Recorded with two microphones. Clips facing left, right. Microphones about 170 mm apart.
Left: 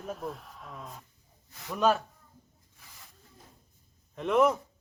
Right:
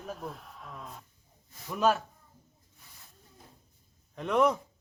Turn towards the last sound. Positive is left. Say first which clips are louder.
# left 2 dB
turn(degrees=0)  # may be behind; listen again after turning